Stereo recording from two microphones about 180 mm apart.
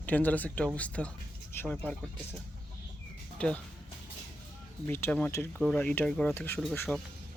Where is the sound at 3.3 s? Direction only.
5° left (ahead or behind).